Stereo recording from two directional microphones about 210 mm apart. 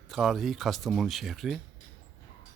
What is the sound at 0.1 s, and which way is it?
Speech, centre (ahead or behind).